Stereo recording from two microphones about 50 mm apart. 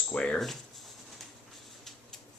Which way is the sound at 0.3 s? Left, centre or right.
Centre.